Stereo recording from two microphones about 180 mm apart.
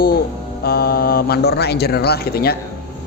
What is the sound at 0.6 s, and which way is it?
A man's voice, 60° left (ahead or behind).